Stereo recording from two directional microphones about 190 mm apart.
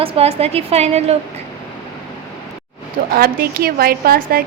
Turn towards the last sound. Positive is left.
turn(degrees=-50)  # may be behind; listen again after turning